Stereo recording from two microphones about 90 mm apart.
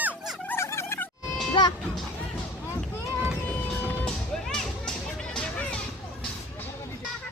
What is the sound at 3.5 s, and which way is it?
Music, 15° left (ahead or behind).